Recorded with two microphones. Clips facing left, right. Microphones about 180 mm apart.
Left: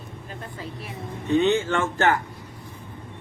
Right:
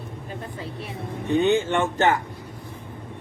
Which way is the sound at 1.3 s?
15° right (ahead or behind).